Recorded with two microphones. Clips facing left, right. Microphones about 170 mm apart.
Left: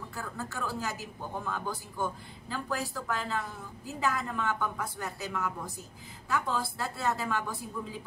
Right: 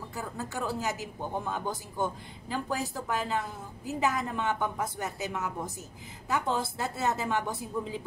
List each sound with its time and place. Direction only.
0.1 s speech: 20° right (ahead or behind)